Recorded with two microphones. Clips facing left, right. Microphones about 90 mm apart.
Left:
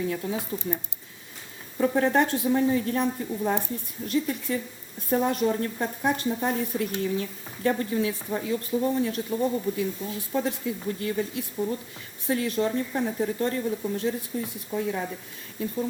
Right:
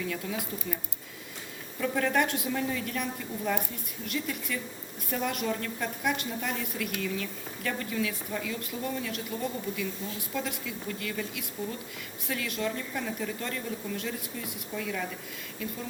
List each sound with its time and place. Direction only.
0.0 s a woman's voice: 30° left (ahead or behind)
1.8 s a woman's voice: 30° left (ahead or behind)